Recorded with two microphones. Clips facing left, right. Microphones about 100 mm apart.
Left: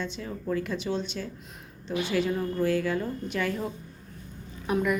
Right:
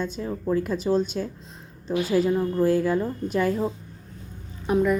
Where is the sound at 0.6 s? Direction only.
40° right (ahead or behind).